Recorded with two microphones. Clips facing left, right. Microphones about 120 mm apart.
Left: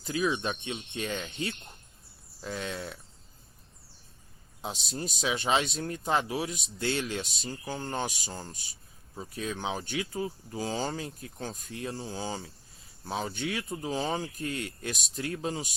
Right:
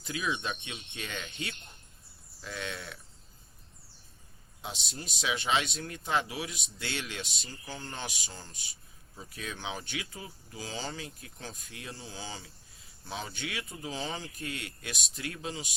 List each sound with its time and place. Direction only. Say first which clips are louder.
0.0 s speech: left 5 dB; 35° left (ahead or behind)
4.6 s speech: left 6 dB; 40° left (ahead or behind)